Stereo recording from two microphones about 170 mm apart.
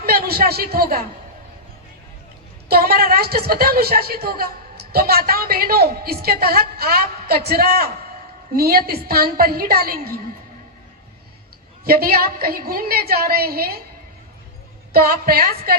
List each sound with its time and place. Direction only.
0.0 s a man's voice: 60° right (ahead or behind)
2.6 s a woman's voice: 60° right (ahead or behind)
11.9 s a woman's voice: 60° right (ahead or behind)
14.9 s a woman's voice: 60° right (ahead or behind)